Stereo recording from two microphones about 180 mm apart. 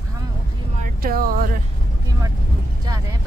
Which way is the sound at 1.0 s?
55° right (ahead or behind).